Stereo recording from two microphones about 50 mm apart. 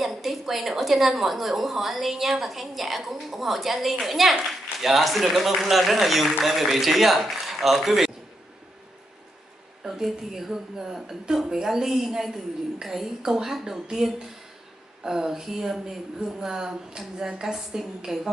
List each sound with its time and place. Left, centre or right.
0.0 s a woman's voice: centre
9.8 s a woman's voice: centre